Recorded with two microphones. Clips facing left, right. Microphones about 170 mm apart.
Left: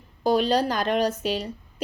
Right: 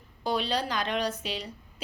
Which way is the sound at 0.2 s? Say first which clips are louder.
Left 8 dB; 45° left (ahead or behind).